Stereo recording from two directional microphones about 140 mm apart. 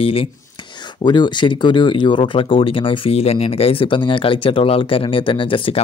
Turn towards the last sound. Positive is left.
turn(degrees=40)  # may be behind; listen again after turning